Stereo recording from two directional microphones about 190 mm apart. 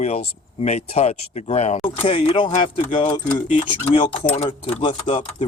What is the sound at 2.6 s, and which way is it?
Speech, 25° left (ahead or behind).